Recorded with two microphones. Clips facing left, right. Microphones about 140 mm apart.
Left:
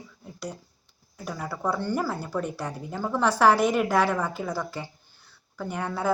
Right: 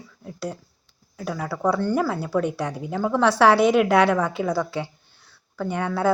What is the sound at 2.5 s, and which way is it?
Speech, 85° right.